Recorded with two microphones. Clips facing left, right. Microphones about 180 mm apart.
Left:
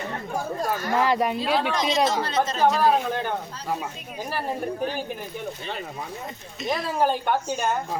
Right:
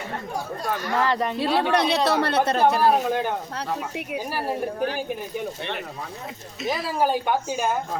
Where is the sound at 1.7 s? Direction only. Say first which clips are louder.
Right 2 dB; 65° right (ahead or behind).